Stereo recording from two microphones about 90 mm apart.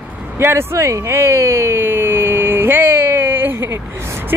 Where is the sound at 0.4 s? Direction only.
25° right (ahead or behind).